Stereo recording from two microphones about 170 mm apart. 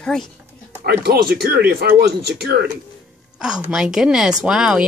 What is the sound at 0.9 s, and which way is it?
Speech, 70° right (ahead or behind).